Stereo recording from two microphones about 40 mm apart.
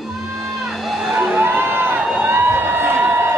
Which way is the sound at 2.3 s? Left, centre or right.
Right.